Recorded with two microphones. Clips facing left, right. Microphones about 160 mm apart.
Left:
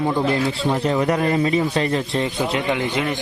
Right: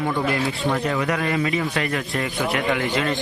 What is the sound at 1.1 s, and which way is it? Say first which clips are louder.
A man's voice: left 4 dB; 35° left (ahead or behind).